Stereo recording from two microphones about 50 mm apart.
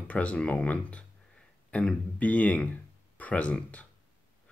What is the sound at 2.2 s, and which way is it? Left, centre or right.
Speech, left.